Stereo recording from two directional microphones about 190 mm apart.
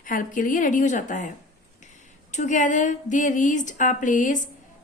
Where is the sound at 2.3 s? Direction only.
40° left (ahead or behind).